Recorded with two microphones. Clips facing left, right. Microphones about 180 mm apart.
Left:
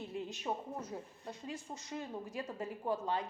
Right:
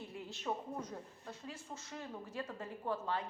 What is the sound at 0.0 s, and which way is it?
A woman's voice, 20° left (ahead or behind).